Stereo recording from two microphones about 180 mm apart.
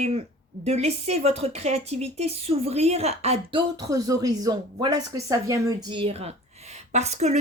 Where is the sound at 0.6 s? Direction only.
35° right (ahead or behind).